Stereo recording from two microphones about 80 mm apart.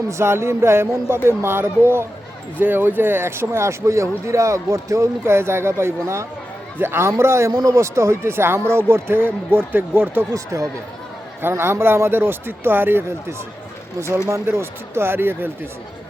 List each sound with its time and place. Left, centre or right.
0.1 s speech: right
7.5 s speech: right
10.3 s speech: right
11.4 s speech: right
14.4 s speech: right